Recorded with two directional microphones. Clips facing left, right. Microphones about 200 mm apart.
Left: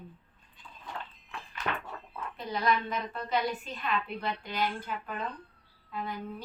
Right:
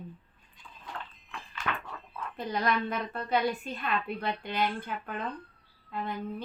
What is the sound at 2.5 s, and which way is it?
A woman's voice, 50° right (ahead or behind).